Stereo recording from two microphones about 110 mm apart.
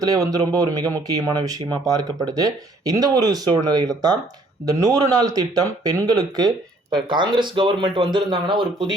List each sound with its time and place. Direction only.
0.0 s speech: 35° right (ahead or behind)